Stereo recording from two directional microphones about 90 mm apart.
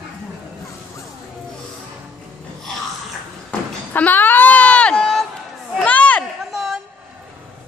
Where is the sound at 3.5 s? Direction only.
15° left (ahead or behind).